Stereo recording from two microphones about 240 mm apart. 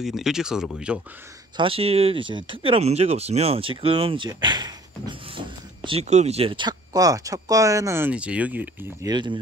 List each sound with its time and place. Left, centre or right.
0.0 s speech: centre
1.6 s speech: right; by 9.1 s centre
9.1 s speech: centre